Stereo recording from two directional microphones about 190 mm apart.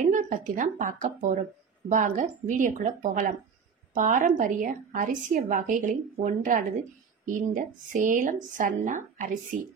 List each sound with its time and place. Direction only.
0.0 s a woman's voice: 40° right (ahead or behind)